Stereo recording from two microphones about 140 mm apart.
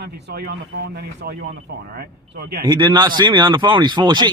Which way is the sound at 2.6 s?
30° right (ahead or behind).